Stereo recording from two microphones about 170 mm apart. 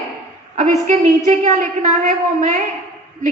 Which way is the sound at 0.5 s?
50° right (ahead or behind).